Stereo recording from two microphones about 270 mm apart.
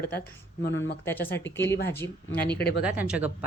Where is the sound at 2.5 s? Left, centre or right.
Left.